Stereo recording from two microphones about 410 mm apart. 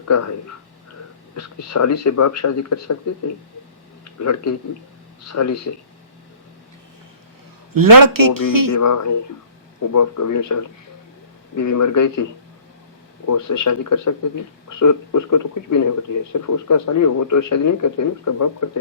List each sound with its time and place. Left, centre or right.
0.1 s speech: left
1.4 s speech: left
4.2 s speech: left
7.7 s speech: right
8.7 s speech: left
13.2 s speech: left